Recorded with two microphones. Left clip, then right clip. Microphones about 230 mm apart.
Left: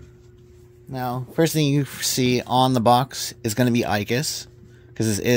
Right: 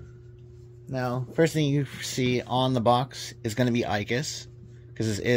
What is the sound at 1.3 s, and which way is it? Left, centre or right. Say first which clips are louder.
Speech: left 4 dB; left.